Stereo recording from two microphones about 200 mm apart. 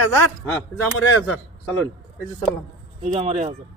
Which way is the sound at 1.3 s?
10° left (ahead or behind).